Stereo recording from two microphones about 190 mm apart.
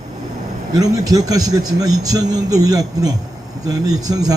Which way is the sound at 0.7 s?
20° right (ahead or behind).